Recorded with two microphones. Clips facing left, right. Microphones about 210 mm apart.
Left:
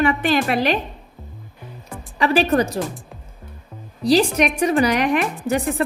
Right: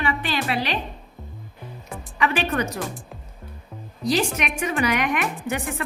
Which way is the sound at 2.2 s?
35° left (ahead or behind).